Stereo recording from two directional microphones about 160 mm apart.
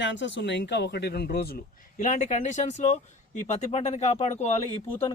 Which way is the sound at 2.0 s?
45° left (ahead or behind).